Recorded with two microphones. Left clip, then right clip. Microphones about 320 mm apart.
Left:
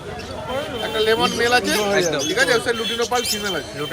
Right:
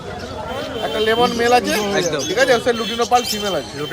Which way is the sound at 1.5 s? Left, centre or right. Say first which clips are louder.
Right 2 dB; centre.